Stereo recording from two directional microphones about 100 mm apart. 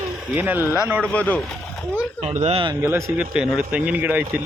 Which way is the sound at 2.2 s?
90° right.